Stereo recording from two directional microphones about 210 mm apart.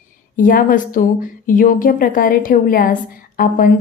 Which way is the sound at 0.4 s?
40° left (ahead or behind).